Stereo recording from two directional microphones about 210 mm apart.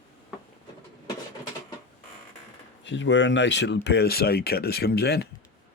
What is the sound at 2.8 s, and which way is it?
Speech, 60° left (ahead or behind).